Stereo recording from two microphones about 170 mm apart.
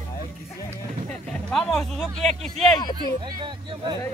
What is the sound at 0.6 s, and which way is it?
Speech, 5° left (ahead or behind).